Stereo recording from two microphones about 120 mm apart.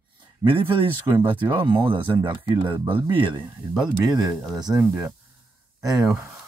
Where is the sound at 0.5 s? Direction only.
45° right (ahead or behind).